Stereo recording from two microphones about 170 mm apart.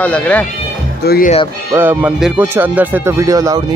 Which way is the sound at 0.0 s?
10° left (ahead or behind).